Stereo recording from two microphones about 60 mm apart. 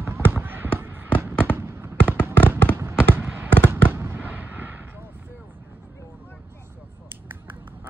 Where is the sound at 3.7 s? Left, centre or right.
Right.